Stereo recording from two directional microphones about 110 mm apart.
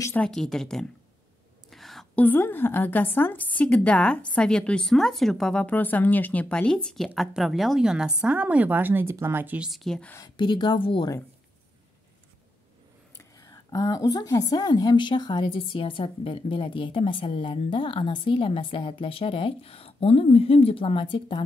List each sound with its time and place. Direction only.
0.1 s speech: 5° left (ahead or behind)
1.7 s whispering: centre (ahead or behind)
2.1 s a woman's voice: 15° left (ahead or behind); by 9.7 s 15° right (ahead or behind)
9.7 s a woman's voice: 5° left (ahead or behind)
10.1 s a woman's voice: 40° left (ahead or behind)
13.2 s a woman's voice: 30° left (ahead or behind); by 21.4 s 50° left (ahead or behind)